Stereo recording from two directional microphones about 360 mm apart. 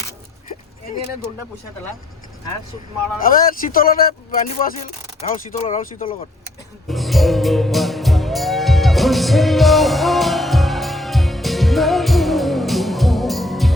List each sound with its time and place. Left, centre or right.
3.2 s speech: left
6.8 s music: centre